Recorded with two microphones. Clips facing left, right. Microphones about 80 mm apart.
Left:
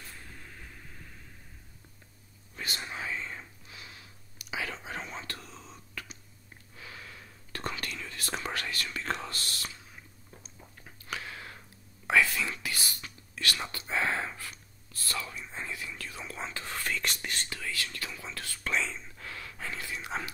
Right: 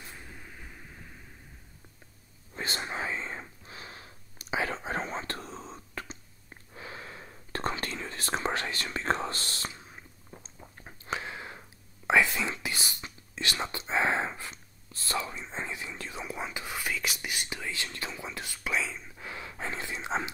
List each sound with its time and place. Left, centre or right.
0.0 s vehicle: centre
2.5 s whispering: right
10.8 s a sound: right
12.1 s whispering: right
18.7 s whispering: centre
19.2 s a sound: right